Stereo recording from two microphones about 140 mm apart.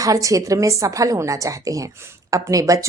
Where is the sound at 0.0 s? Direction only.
25° right (ahead or behind).